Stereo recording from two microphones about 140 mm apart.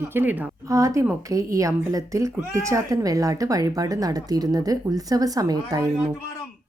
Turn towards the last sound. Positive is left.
turn(degrees=-25)  # may be behind; listen again after turning